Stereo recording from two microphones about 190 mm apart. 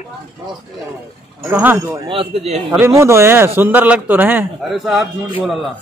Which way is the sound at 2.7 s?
10° right (ahead or behind).